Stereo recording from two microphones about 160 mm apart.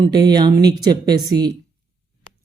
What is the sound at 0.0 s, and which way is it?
Speech, 25° right (ahead or behind).